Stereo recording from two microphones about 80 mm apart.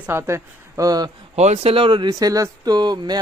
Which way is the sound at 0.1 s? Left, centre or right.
Right.